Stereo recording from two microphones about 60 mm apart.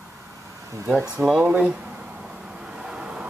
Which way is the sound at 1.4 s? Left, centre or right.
Right.